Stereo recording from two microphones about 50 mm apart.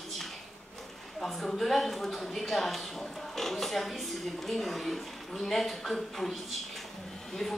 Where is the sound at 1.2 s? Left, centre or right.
Centre.